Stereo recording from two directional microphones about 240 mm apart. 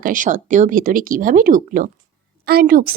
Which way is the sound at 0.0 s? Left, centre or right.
Right.